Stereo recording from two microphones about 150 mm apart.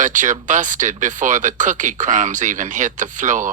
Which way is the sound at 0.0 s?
55° right (ahead or behind).